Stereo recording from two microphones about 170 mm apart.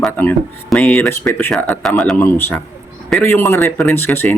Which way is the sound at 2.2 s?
15° left (ahead or behind).